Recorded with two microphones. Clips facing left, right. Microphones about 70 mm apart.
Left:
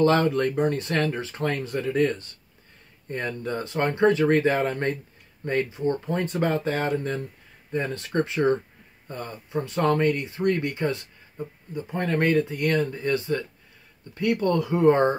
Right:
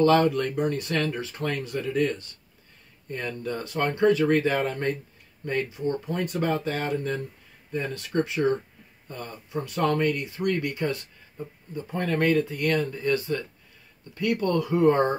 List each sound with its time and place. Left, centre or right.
0.0 s speech: left